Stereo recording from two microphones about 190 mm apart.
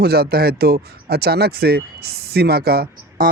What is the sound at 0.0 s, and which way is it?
Speech, 55° right (ahead or behind).